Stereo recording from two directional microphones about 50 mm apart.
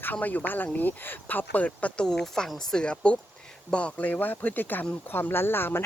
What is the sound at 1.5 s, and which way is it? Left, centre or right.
Speech, left.